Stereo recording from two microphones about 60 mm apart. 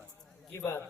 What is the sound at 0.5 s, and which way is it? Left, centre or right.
Speech, left.